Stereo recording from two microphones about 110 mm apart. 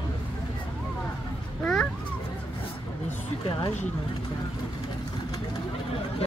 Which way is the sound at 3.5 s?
45° left (ahead or behind).